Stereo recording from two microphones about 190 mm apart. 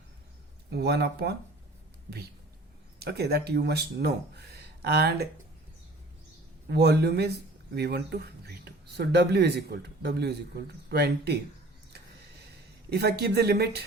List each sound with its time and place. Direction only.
0.7 s speech: 60° right (ahead or behind)
3.0 s speech: 55° right (ahead or behind)
6.7 s speech: 60° right (ahead or behind)
12.9 s speech: 55° right (ahead or behind)